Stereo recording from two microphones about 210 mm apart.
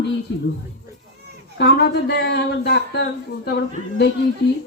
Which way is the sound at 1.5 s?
55° left (ahead or behind).